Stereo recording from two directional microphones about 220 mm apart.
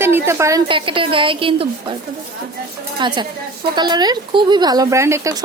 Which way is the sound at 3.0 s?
20° right (ahead or behind).